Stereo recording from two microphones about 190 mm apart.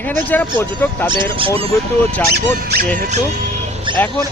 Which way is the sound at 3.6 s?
30° right (ahead or behind).